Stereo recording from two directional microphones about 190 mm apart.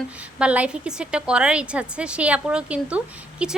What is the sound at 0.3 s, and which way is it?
A woman's voice, 5° right (ahead or behind).